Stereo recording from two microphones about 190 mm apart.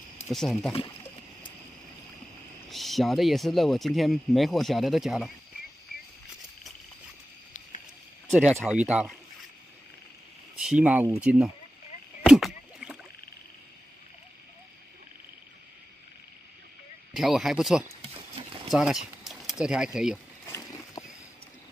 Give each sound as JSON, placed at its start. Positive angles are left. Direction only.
{"t": 0.3, "sound": "speech", "side_deg": 0}
{"t": 2.7, "sound": "speech", "side_deg": 0}
{"t": 8.3, "sound": "speech", "side_deg": -5}
{"t": 10.6, "sound": "speech", "side_deg": -5}
{"t": 12.3, "sound": "rowboat", "side_deg": 0}
{"t": 17.1, "sound": "speech", "side_deg": 0}
{"t": 18.7, "sound": "a sound", "side_deg": 0}
{"t": 19.6, "sound": "speech", "side_deg": -5}
{"t": 20.4, "sound": "a sound", "side_deg": 15}